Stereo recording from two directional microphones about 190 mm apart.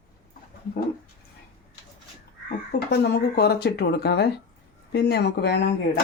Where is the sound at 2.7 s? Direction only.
60° left (ahead or behind).